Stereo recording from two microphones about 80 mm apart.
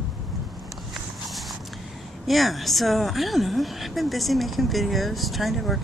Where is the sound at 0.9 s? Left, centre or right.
Centre.